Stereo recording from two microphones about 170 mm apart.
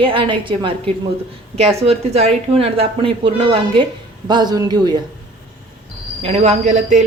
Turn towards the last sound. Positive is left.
turn(degrees=-45)  # may be behind; listen again after turning